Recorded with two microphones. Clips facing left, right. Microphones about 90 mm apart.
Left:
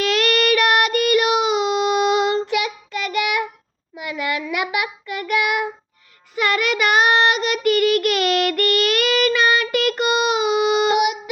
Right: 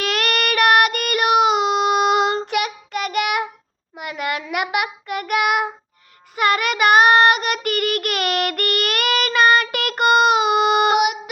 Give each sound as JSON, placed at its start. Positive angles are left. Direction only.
{"t": 0.0, "sound": "child singing", "side_deg": -50}
{"t": 3.9, "sound": "a sound", "side_deg": -50}
{"t": 4.5, "sound": "child singing", "side_deg": -55}
{"t": 6.3, "sound": "child singing", "side_deg": -45}